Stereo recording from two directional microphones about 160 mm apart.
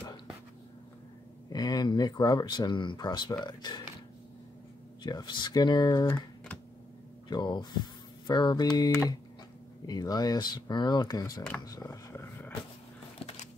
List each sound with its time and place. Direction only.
1.5 s speech: 25° left (ahead or behind)
5.0 s speech: 30° left (ahead or behind)
7.2 s speech: 30° left (ahead or behind)